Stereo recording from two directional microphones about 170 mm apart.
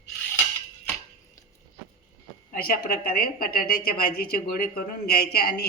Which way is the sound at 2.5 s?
60° left (ahead or behind).